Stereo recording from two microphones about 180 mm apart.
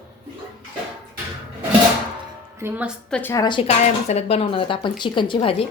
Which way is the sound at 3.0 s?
5° left (ahead or behind).